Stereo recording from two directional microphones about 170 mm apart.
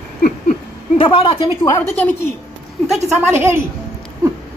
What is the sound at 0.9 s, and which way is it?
Speech, 35° left (ahead or behind).